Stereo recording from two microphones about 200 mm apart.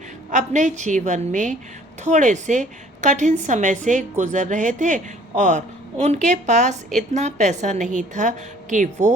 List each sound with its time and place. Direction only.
0.3 s a woman's voice: 35° right (ahead or behind)